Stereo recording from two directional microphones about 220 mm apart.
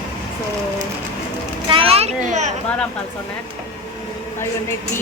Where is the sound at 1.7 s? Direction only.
25° right (ahead or behind).